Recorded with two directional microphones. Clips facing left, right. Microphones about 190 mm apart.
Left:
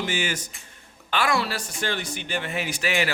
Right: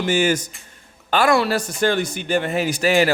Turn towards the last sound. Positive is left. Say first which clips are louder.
# right 9 dB
turn(degrees=-40)  # may be behind; listen again after turning